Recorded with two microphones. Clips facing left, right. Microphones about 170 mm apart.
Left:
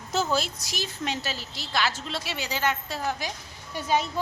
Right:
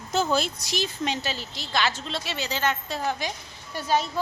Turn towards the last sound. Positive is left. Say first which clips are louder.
# right 1 dB
turn(degrees=15)  # may be behind; listen again after turning